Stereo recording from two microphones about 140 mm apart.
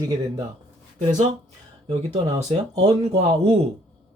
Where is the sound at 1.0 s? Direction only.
60° right (ahead or behind).